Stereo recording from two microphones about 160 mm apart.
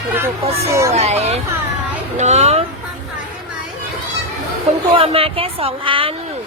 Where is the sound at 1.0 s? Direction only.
40° right (ahead or behind).